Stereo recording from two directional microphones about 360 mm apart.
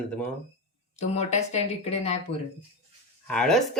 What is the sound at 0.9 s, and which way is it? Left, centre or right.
A woman's voice, centre.